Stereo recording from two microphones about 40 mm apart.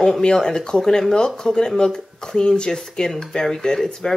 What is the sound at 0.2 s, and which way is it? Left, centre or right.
Speech, centre.